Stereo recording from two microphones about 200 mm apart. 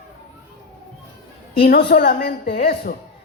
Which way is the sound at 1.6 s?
50° left (ahead or behind).